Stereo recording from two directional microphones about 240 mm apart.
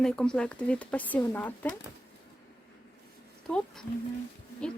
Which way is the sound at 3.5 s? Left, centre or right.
Centre.